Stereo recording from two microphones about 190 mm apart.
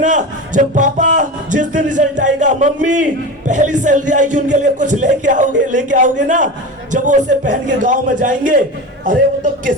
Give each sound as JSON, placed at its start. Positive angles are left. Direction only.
{"t": 0.0, "sound": "speech", "side_deg": -40}